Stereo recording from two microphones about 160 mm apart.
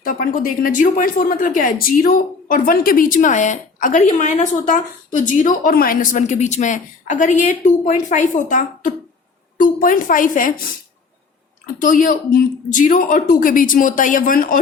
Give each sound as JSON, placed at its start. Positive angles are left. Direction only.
{"t": 0.0, "sound": "speech", "side_deg": 65}
{"t": 11.6, "sound": "speech", "side_deg": 55}